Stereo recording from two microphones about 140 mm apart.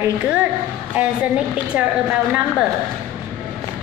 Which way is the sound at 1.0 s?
10° right (ahead or behind).